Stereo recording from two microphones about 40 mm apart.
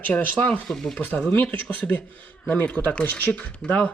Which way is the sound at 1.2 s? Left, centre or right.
Left.